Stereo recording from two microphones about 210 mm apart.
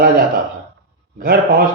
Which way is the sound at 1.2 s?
45° right (ahead or behind).